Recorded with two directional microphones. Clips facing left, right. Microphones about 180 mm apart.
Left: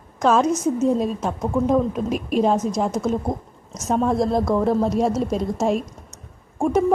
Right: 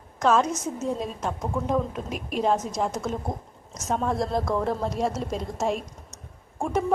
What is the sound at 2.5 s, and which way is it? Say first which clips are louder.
A woman's voice: left 4 dB; 15° left (ahead or behind).